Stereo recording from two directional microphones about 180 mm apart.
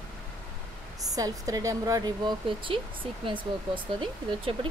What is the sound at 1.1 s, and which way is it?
Speech, 20° right (ahead or behind).